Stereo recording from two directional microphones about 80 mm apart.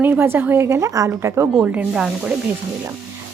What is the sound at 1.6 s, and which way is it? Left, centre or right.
Snake, centre.